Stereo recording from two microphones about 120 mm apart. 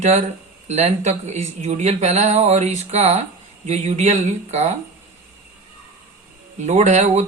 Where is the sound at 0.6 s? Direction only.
60° right (ahead or behind); by 4.7 s 75° right (ahead or behind).